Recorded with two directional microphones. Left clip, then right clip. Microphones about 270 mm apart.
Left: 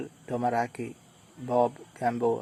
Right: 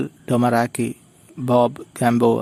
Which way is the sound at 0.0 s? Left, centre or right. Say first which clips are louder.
Right 9 dB; right.